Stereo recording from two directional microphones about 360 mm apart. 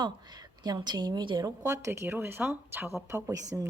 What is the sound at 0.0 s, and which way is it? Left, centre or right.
A woman's voice, centre.